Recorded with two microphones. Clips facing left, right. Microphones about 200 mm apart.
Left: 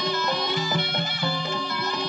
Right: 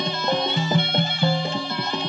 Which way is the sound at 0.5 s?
25° right (ahead or behind).